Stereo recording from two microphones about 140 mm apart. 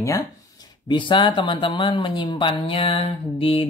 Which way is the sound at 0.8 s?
35° left (ahead or behind).